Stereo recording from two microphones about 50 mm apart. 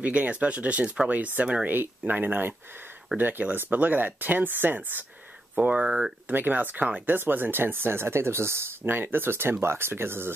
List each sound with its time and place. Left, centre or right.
0.0 s speech: right
5.6 s speech: right
6.2 s speech: right
8.8 s speech: right